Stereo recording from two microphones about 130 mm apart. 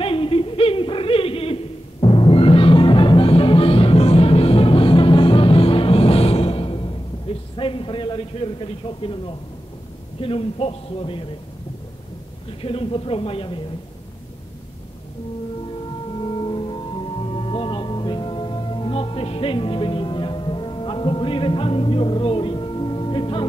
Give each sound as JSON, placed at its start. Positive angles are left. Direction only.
{"t": 0.0, "sound": "a sound", "side_deg": 45}
{"t": 12.6, "sound": "speech", "side_deg": 45}
{"t": 16.2, "sound": "music", "side_deg": 40}